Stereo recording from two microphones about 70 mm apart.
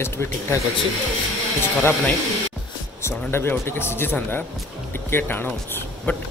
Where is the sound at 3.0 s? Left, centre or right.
Left.